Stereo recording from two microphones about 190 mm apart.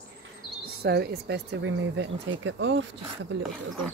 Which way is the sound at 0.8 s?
55° right (ahead or behind).